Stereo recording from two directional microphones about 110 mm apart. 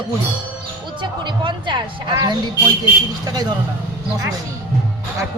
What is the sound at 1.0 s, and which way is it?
Speech, 45° right (ahead or behind).